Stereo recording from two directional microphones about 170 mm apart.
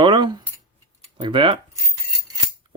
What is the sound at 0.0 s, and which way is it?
Scissors, 25° right (ahead or behind).